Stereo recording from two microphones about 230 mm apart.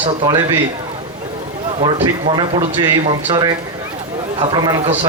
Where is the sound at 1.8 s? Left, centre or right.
Right.